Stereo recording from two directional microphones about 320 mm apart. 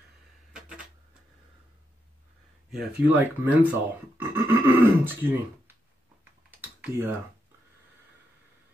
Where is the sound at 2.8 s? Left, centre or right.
Centre.